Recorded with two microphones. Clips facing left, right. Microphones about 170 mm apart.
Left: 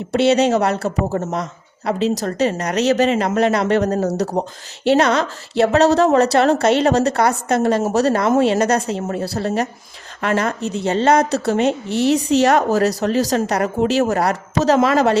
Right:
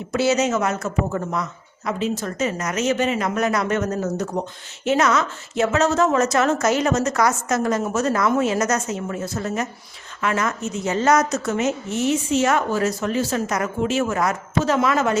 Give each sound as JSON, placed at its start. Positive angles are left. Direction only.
{"t": 0.1, "sound": "a woman's voice", "side_deg": 30}